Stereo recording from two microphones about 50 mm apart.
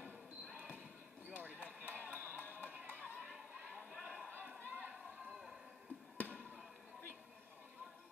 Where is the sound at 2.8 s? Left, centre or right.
Right.